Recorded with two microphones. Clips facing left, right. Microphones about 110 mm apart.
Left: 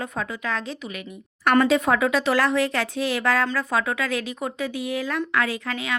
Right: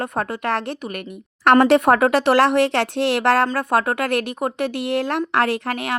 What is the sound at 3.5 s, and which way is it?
Speech, 60° right (ahead or behind).